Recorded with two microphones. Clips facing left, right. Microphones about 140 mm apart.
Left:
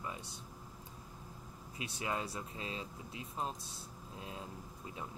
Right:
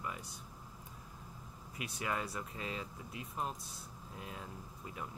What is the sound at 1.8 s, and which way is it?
Speech, 25° left (ahead or behind).